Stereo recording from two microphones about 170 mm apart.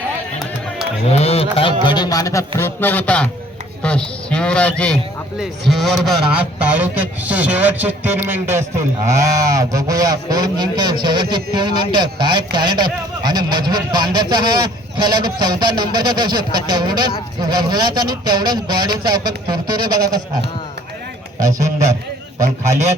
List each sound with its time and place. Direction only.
1.1 s speech: 35° left (ahead or behind)
1.9 s a sound: 25° left (ahead or behind)
2.6 s a man's voice: 10° left (ahead or behind); by 20.2 s 20° right (ahead or behind)
21.4 s speech: 20° right (ahead or behind)